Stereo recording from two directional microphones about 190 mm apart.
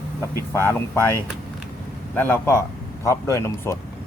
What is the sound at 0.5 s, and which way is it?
Speech, 10° left (ahead or behind).